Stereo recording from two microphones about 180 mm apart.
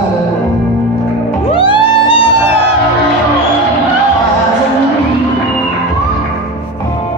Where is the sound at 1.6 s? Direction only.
30° left (ahead or behind).